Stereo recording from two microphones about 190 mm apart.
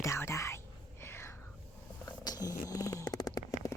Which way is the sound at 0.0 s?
15° left (ahead or behind).